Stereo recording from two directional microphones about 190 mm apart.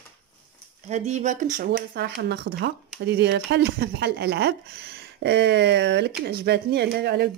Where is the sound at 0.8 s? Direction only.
35° right (ahead or behind).